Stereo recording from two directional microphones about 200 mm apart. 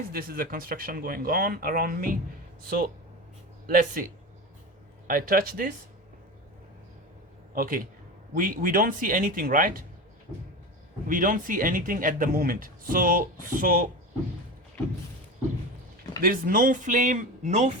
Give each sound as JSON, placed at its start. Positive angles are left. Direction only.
{"t": 0.1, "sound": "speech", "side_deg": -50}
{"t": 5.0, "sound": "speech", "side_deg": -45}
{"t": 7.5, "sound": "a man's voice", "side_deg": -45}
{"t": 11.1, "sound": "speech", "side_deg": -40}
{"t": 16.2, "sound": "speech", "side_deg": -45}